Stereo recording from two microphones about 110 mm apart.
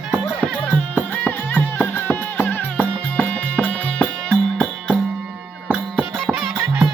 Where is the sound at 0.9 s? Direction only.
15° left (ahead or behind).